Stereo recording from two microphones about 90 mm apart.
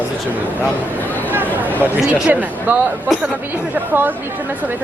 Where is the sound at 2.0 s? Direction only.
10° right (ahead or behind).